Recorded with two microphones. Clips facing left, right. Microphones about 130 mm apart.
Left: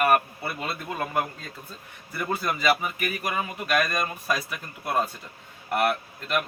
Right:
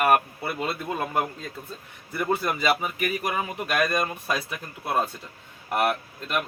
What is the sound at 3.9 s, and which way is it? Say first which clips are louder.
Speech: right 1 dB; 30° right (ahead or behind).